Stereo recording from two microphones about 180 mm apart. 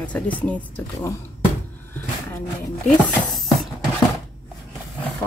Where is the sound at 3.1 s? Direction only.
Centre (ahead or behind).